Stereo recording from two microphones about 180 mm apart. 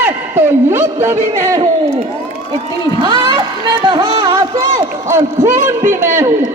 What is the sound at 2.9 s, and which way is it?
Speech, 25° right (ahead or behind).